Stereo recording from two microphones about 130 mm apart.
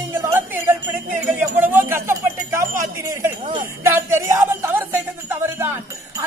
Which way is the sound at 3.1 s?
25° right (ahead or behind).